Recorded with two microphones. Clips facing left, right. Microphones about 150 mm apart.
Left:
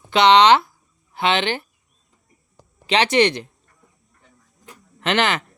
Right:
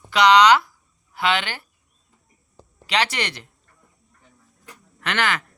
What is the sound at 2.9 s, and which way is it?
Speech, 20° left (ahead or behind).